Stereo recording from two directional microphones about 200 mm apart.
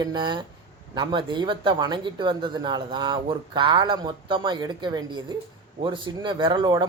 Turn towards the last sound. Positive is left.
turn(degrees=-25)  # may be behind; listen again after turning